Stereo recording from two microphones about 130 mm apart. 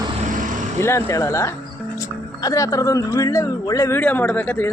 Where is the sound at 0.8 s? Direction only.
20° left (ahead or behind).